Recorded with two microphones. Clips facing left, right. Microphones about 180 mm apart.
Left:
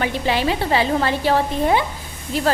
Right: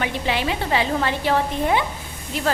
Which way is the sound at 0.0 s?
40° left (ahead or behind).